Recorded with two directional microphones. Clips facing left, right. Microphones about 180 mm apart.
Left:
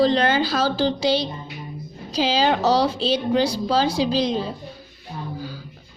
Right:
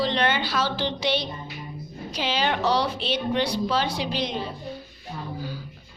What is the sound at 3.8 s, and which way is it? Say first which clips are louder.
Speech: left 7 dB; 90° left.